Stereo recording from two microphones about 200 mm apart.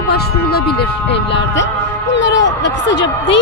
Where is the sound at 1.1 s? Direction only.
65° left (ahead or behind).